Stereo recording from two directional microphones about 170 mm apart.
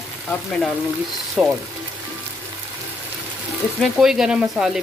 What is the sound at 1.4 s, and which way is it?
Stir, 5° right (ahead or behind).